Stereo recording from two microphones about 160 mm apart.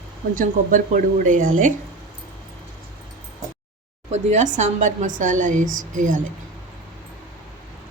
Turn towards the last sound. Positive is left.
turn(degrees=-55)  # may be behind; listen again after turning